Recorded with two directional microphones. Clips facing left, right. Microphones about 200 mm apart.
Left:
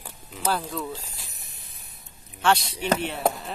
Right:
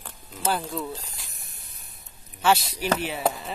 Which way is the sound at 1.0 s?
5° left (ahead or behind).